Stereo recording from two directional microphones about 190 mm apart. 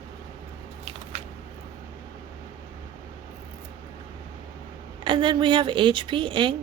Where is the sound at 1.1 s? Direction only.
30° right (ahead or behind).